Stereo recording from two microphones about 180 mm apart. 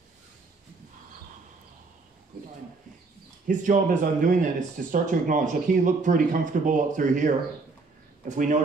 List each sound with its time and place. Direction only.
3.4 s speech: 45° right (ahead or behind)